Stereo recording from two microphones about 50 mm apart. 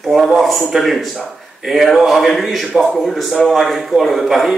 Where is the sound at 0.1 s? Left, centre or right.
Centre.